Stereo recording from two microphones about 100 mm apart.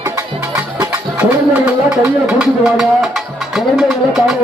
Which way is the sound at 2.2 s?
5° right (ahead or behind).